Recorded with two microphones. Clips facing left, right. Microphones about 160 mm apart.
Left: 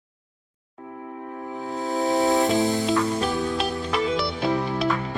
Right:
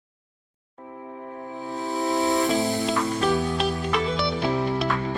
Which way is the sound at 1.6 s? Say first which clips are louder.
Left 2 dB; 40° left (ahead or behind).